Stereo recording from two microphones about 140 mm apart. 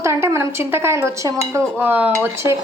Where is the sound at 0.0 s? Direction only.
20° right (ahead or behind).